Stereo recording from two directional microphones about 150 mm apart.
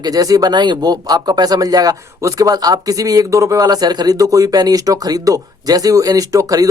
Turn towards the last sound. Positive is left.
turn(degrees=-25)  # may be behind; listen again after turning